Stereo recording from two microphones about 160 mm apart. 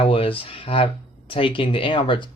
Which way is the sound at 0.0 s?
35° left (ahead or behind).